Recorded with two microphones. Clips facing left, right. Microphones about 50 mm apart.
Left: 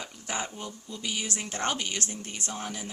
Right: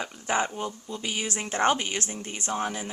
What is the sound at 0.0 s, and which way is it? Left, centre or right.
A woman's voice, right.